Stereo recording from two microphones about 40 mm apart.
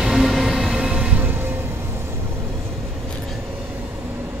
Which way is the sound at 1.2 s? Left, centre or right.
Right.